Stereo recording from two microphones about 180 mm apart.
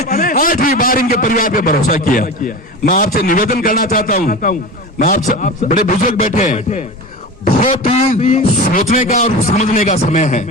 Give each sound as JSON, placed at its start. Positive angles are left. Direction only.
{"t": 0.0, "sound": "a man's voice", "side_deg": 45}